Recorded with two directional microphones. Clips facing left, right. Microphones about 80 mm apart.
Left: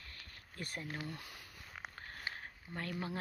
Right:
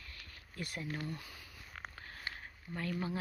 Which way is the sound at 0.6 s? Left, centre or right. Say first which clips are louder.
Right 2 dB; left.